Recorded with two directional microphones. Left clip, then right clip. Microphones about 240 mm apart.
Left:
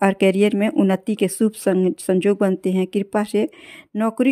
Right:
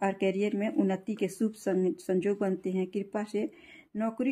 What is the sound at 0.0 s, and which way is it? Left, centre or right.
Speech, left.